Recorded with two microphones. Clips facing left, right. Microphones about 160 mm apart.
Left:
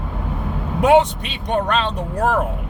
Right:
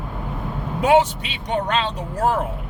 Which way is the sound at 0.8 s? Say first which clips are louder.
Left 2 dB; 65° left (ahead or behind).